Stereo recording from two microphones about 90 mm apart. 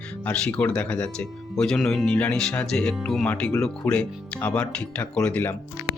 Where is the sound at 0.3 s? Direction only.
15° left (ahead or behind).